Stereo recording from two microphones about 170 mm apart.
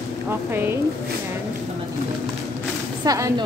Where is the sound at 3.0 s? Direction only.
20° right (ahead or behind).